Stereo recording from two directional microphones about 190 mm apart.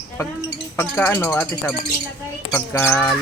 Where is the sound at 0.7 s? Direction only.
10° left (ahead or behind).